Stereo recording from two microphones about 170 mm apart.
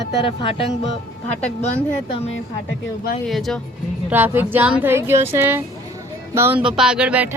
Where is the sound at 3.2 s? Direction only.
Centre (ahead or behind).